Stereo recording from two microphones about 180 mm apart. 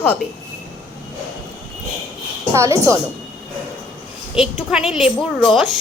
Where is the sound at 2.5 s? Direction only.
15° right (ahead or behind).